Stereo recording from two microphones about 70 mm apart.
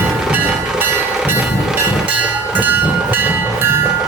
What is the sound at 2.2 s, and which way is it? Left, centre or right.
Train, right.